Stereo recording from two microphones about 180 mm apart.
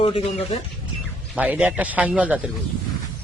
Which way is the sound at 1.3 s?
5° right (ahead or behind).